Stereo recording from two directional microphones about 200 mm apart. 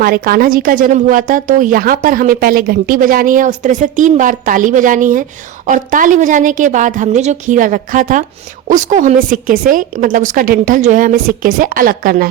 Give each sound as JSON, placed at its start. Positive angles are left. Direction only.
{"t": 0.0, "sound": "a woman's voice", "side_deg": -45}